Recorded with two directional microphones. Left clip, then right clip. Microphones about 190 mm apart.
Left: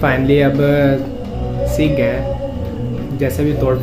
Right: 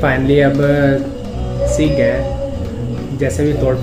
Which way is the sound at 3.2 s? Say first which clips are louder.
Right 1 dB; 10° left (ahead or behind).